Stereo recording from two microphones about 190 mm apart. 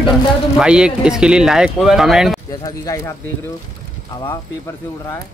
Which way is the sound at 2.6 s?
15° left (ahead or behind).